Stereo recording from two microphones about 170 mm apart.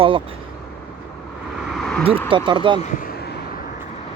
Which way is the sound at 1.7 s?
5° left (ahead or behind).